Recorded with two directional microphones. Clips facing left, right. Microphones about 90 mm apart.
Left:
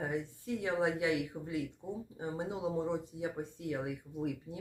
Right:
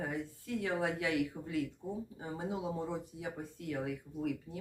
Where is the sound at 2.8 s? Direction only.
25° left (ahead or behind).